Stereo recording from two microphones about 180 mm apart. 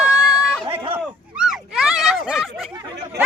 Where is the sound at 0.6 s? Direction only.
30° right (ahead or behind).